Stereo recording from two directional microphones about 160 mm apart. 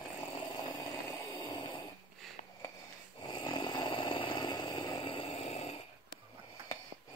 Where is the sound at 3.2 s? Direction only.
30° left (ahead or behind).